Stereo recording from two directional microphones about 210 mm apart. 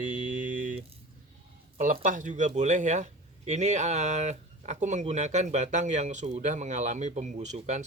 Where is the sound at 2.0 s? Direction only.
35° right (ahead or behind).